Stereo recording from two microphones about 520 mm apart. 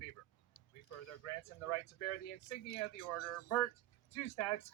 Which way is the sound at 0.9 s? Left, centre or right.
Left.